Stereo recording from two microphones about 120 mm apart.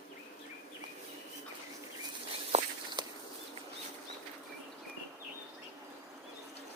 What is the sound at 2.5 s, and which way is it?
Walk, 60° right (ahead or behind).